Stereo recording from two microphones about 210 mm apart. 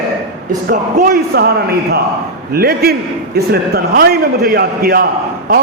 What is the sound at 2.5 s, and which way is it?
A man's voice, 45° right (ahead or behind).